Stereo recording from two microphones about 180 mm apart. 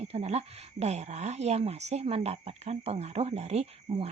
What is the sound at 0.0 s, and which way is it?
Speech, 35° right (ahead or behind).